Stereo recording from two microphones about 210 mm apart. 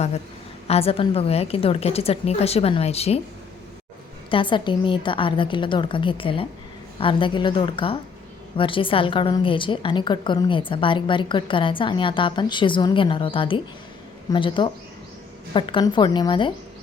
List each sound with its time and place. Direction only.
0.7 s a woman's voice: 30° left (ahead or behind)
4.3 s a woman's voice: 25° left (ahead or behind)